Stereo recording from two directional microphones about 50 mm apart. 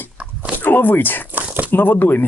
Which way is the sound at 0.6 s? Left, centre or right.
Left.